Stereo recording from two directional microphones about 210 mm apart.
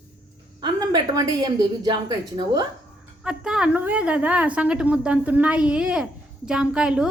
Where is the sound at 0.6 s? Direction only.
20° right (ahead or behind).